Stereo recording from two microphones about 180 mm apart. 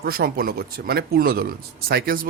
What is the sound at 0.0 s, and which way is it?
Speech, 55° right (ahead or behind).